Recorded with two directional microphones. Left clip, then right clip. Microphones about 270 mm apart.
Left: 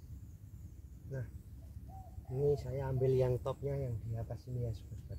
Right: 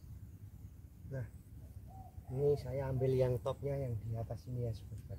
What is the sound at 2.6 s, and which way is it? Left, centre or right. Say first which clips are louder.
Speech: left 1 dB; centre.